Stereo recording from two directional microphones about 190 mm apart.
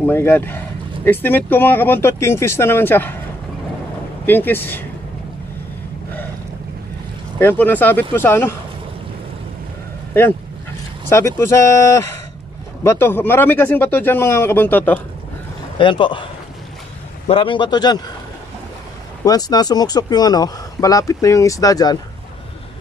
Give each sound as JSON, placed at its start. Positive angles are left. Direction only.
{"t": 0.0, "sound": "speech", "side_deg": 10}
{"t": 4.3, "sound": "speech", "side_deg": 10}
{"t": 7.3, "sound": "speech", "side_deg": 10}
{"t": 11.1, "sound": "speech", "side_deg": 15}
{"t": 15.8, "sound": "speech", "side_deg": 25}
{"t": 17.3, "sound": "speech", "side_deg": 25}
{"t": 19.2, "sound": "speech", "side_deg": 20}